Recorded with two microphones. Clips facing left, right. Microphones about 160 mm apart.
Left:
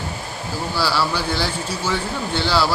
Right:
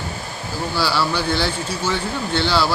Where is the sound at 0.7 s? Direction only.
5° left (ahead or behind).